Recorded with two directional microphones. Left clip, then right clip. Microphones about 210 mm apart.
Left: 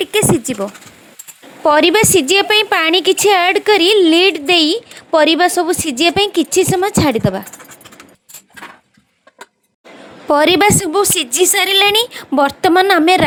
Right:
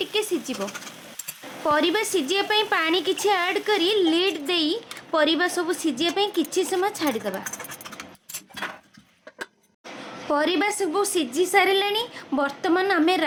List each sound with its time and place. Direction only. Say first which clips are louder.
0.0 s a sound: left 11 dB; 35° left (ahead or behind)
1.6 s a woman's voice: left 11 dB; 35° left (ahead or behind)
10.2 s a woman's voice: left 12 dB; 40° left (ahead or behind)